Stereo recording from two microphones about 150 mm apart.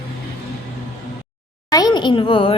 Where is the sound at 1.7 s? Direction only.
30° left (ahead or behind).